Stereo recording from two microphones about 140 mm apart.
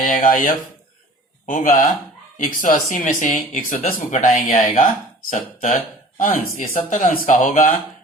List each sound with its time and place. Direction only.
0.0 s speech: 70° left (ahead or behind)